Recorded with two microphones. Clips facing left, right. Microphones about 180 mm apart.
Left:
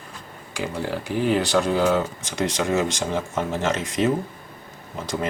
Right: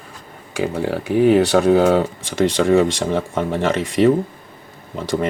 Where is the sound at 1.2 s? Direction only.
60° right (ahead or behind).